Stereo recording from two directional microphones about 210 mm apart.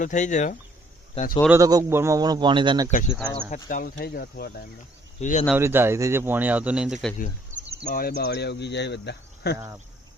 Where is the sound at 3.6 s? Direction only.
45° left (ahead or behind).